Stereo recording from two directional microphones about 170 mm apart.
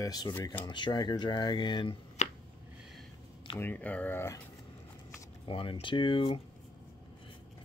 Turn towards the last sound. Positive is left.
turn(degrees=30)  # may be behind; listen again after turning